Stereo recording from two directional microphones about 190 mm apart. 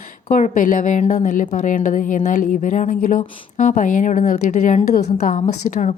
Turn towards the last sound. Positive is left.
turn(degrees=35)  # may be behind; listen again after turning